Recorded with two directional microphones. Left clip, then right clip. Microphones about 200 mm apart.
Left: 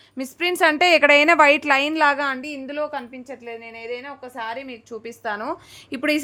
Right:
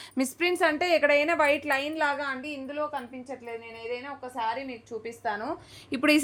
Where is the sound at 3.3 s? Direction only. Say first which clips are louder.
Left 4 dB; 30° left (ahead or behind).